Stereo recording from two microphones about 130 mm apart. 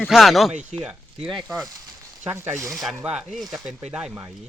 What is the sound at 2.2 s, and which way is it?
Speech, 20° right (ahead or behind).